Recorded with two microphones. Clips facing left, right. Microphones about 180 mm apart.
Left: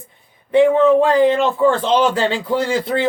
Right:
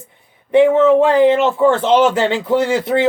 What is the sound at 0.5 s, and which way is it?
A man's voice, 20° right (ahead or behind).